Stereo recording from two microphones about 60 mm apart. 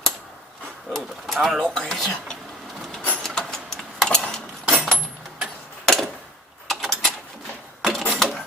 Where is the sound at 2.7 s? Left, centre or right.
Centre.